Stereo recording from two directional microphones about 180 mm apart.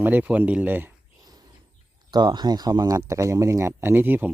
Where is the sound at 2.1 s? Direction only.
25° right (ahead or behind).